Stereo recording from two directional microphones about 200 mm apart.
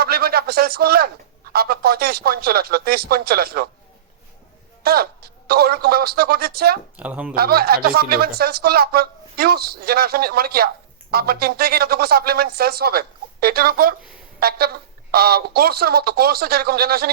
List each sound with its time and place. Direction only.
0.0 s a sound: 50° right (ahead or behind)
1.5 s speech: 50° right (ahead or behind)
4.8 s speech: 50° right (ahead or behind)
6.9 s speech: 5° right (ahead or behind)
7.3 s speech: 50° right (ahead or behind)